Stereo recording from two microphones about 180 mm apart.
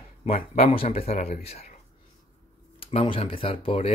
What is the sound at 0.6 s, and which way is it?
Speech, 30° left (ahead or behind).